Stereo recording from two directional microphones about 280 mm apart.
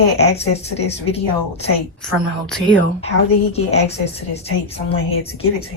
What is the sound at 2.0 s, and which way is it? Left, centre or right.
Speech, centre.